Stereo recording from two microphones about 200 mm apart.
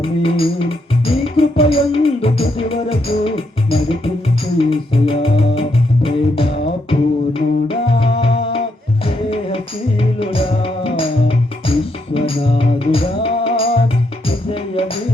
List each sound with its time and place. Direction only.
0.0 s music: 25° left (ahead or behind)